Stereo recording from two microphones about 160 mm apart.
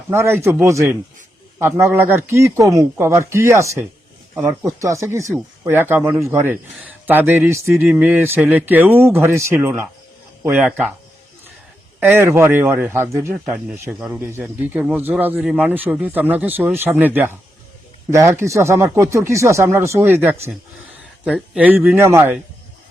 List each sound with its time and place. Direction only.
0.1 s speech: 15° right (ahead or behind)
11.9 s speech: 15° right (ahead or behind)
13.3 s speech: 5° right (ahead or behind)